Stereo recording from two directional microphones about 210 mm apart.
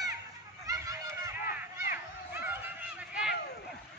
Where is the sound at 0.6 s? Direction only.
15° right (ahead or behind).